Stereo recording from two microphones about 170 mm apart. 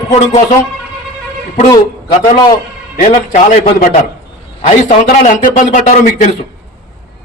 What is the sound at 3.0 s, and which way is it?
A man's voice, 50° left (ahead or behind).